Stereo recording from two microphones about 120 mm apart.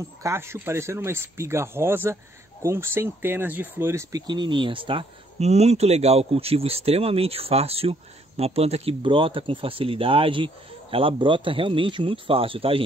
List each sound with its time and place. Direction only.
0.2 s speech: 20° right (ahead or behind)
4.3 s speech: 40° right (ahead or behind)
5.4 s speech: 65° right (ahead or behind)
9.0 s speech: 45° right (ahead or behind)